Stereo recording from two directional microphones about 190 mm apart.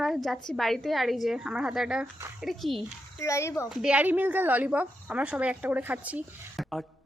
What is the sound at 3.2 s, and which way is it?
Speech, 15° left (ahead or behind).